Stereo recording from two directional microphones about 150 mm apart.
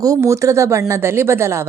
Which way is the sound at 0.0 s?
20° right (ahead or behind).